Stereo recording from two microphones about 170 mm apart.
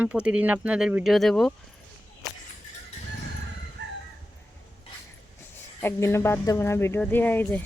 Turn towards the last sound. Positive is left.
turn(degrees=10)  # may be behind; listen again after turning